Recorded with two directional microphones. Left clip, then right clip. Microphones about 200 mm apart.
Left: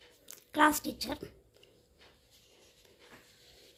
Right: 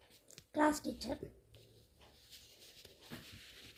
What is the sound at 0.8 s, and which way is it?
Speech, 5° left (ahead or behind).